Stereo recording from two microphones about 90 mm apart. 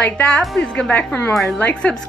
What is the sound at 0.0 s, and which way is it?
A woman's voice, 15° left (ahead or behind).